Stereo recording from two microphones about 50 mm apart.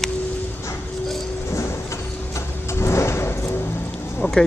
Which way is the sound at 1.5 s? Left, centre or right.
Left.